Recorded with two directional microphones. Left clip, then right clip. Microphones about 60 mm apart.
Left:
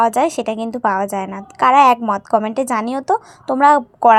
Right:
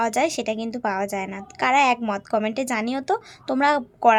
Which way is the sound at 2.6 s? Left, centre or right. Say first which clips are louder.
Left 6 dB; left.